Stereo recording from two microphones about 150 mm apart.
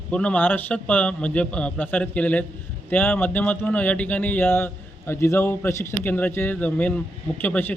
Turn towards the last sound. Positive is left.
turn(degrees=15)  # may be behind; listen again after turning